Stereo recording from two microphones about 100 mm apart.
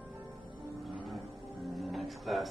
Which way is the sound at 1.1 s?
Centre (ahead or behind).